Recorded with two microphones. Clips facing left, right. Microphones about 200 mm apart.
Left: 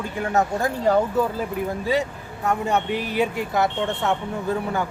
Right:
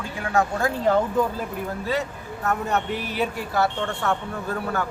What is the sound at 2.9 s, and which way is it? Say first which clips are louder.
Speech: left 3 dB; 15° left (ahead or behind).